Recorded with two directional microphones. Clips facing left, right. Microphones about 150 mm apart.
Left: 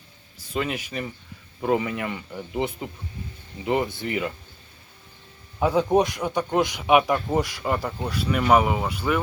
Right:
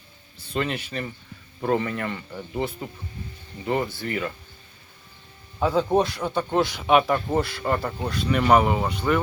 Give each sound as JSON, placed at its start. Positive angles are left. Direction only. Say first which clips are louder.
{"t": 0.4, "sound": "speech", "louder": "even", "side_deg": 10}
{"t": 5.5, "sound": "speech", "louder": "left 1 dB", "side_deg": 15}